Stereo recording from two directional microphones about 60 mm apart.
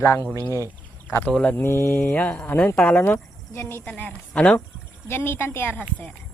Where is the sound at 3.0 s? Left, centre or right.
Left.